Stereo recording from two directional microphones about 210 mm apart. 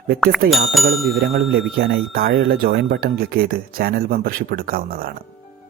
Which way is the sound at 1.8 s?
55° right (ahead or behind).